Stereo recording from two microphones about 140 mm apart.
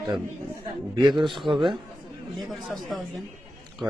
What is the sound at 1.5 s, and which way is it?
Speech, 35° right (ahead or behind).